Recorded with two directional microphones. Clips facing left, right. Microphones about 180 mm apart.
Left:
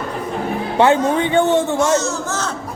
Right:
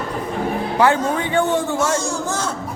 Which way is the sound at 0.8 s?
25° left (ahead or behind).